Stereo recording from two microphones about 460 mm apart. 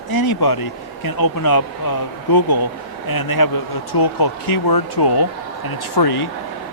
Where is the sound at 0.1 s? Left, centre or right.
Left.